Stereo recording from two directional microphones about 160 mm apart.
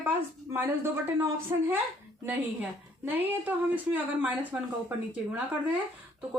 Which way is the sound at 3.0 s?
10° right (ahead or behind).